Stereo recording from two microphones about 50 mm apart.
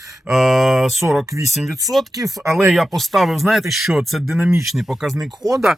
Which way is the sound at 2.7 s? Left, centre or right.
Centre.